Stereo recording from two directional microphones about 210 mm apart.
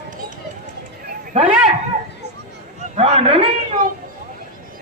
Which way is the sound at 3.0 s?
30° right (ahead or behind).